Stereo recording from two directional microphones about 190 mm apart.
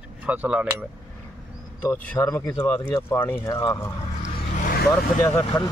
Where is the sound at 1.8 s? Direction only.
10° left (ahead or behind).